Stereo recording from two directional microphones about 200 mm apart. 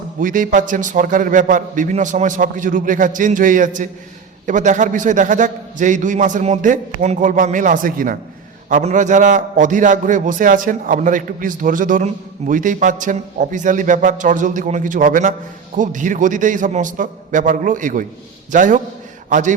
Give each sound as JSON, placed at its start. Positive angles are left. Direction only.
{"t": 0.2, "sound": "a man's voice", "side_deg": -40}